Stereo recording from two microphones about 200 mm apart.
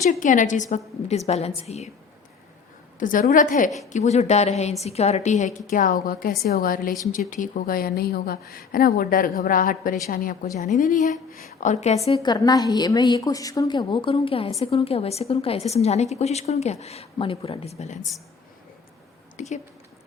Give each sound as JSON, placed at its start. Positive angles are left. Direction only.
{"t": 0.1, "sound": "a woman's voice", "side_deg": 40}
{"t": 3.0, "sound": "a woman's voice", "side_deg": 40}
{"t": 12.0, "sound": "a woman's voice", "side_deg": 25}
{"t": 19.4, "sound": "speech", "side_deg": 40}